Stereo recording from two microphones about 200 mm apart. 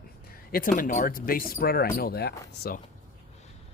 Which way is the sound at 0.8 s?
40° left (ahead or behind).